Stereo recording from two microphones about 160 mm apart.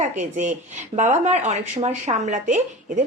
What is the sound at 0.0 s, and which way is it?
A woman's voice, 50° right (ahead or behind).